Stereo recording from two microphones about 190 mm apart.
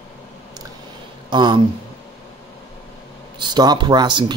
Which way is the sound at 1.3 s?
25° right (ahead or behind).